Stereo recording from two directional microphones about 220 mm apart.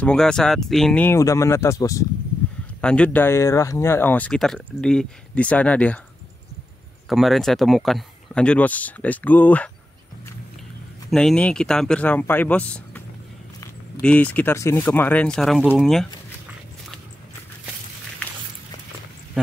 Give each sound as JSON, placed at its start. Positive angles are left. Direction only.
{"t": 0.0, "sound": "speech", "side_deg": 5}
{"t": 7.1, "sound": "speech", "side_deg": 0}
{"t": 11.1, "sound": "speech", "side_deg": 0}
{"t": 14.0, "sound": "speech", "side_deg": 5}